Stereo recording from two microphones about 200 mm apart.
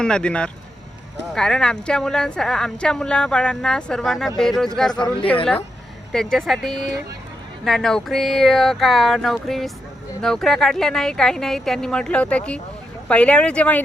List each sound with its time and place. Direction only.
0.0 s speech: 5° left (ahead or behind)
4.9 s a woman's voice: 20° left (ahead or behind)
6.1 s speech: centre (ahead or behind)